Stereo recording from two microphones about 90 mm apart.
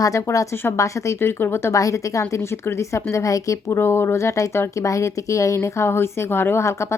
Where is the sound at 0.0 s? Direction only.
40° left (ahead or behind).